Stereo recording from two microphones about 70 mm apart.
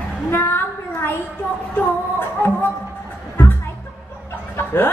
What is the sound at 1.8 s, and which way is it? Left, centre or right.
Music, left.